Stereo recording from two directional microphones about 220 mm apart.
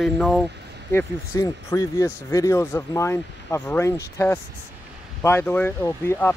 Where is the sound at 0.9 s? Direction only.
10° left (ahead or behind).